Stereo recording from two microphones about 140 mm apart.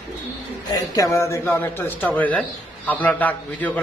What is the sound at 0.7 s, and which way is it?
A man's voice, 25° left (ahead or behind).